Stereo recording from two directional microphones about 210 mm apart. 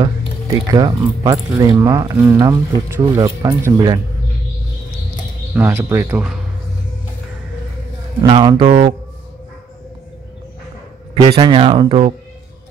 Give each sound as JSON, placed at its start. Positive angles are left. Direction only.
{"t": 0.7, "sound": "speech", "side_deg": -20}
{"t": 5.5, "sound": "speech", "side_deg": -10}
{"t": 8.2, "sound": "speech", "side_deg": -20}
{"t": 11.1, "sound": "speech", "side_deg": -20}